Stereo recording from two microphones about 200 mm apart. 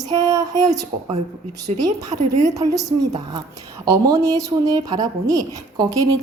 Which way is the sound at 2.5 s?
15° right (ahead or behind).